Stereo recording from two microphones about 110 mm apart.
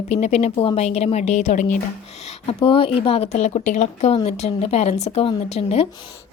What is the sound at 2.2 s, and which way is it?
Speech, 75° left (ahead or behind).